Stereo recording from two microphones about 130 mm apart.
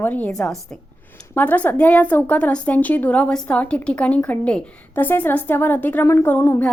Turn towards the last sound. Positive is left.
turn(degrees=20)  # may be behind; listen again after turning